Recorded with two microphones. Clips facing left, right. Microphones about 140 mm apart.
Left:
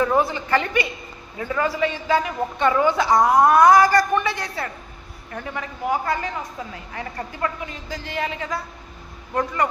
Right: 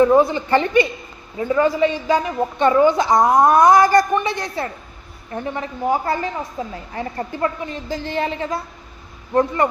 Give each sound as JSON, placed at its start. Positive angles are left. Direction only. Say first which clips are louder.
{"t": 0.0, "sound": "a woman's voice", "louder": "right 6 dB", "side_deg": -20}